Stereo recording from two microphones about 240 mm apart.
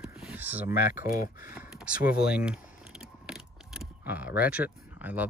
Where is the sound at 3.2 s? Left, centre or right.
Centre.